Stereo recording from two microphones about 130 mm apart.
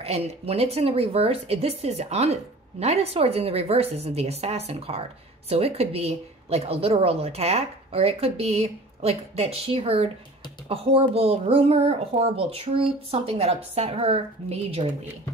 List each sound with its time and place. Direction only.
0.0 s speech: 50° right (ahead or behind)